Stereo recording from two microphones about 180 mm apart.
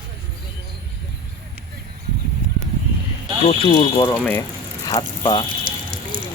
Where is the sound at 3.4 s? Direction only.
30° left (ahead or behind).